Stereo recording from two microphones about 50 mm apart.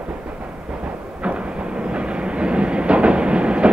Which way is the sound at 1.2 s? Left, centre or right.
Right.